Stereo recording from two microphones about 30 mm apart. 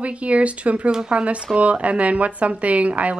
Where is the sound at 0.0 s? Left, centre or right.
Right.